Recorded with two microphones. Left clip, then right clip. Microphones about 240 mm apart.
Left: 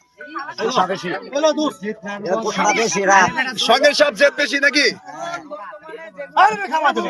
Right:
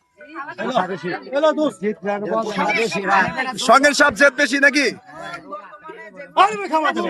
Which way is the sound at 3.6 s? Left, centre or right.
Centre.